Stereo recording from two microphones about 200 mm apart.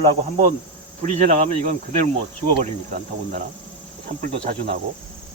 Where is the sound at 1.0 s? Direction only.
40° right (ahead or behind).